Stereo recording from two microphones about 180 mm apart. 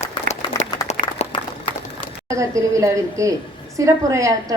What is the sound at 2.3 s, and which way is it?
A woman's voice, 15° right (ahead or behind).